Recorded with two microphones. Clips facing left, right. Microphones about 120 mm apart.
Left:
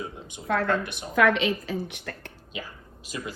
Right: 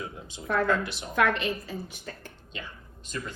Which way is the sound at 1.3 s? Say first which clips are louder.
Left 5 dB; 90° left.